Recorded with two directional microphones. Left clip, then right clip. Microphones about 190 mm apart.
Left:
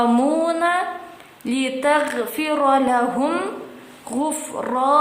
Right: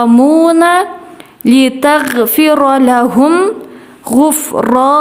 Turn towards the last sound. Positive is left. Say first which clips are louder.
# right 9 dB
turn(degrees=-55)  # may be behind; listen again after turning